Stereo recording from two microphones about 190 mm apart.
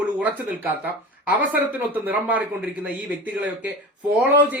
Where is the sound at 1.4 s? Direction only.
10° right (ahead or behind).